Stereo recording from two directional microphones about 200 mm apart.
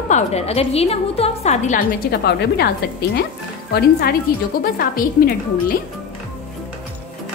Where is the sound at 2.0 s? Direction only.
55° left (ahead or behind).